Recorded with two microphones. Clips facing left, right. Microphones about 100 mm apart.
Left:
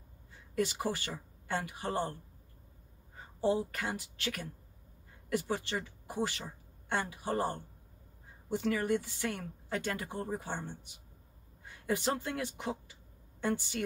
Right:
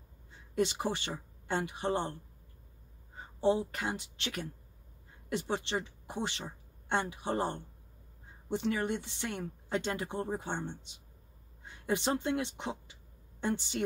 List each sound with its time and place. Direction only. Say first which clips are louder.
0.6 s speech: right 1 dB; 25° right (ahead or behind)
3.3 s speech: right 2 dB; 25° right (ahead or behind)